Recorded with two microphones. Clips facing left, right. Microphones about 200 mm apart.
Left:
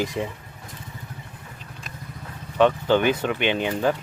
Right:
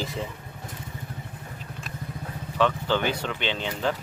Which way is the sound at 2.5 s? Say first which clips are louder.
Left 6 dB; 20° left (ahead or behind).